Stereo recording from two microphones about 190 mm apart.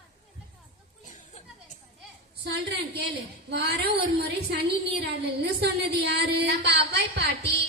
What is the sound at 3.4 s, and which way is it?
Speech, 60° right (ahead or behind).